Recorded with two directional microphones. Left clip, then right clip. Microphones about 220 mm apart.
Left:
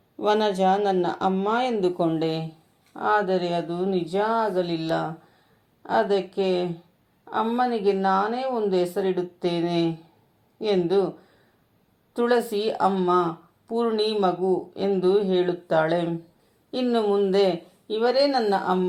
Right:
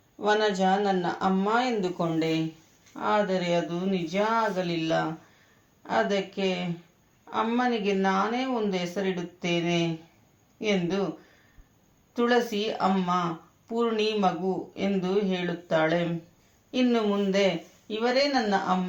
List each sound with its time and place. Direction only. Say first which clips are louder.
0.2 s a woman's voice: left 3 dB; 45° left (ahead or behind)
12.1 s a woman's voice: left 2 dB; 50° left (ahead or behind)